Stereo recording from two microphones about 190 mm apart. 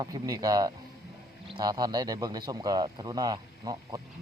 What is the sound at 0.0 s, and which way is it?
Speech, 20° right (ahead or behind).